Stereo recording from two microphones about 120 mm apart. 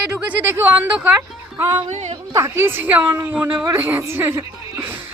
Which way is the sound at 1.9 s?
70° right (ahead or behind).